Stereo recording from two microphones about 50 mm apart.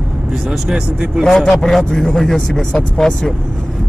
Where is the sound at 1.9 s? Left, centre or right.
Centre.